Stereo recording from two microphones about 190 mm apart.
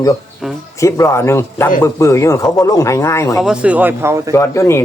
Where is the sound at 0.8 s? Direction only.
15° left (ahead or behind).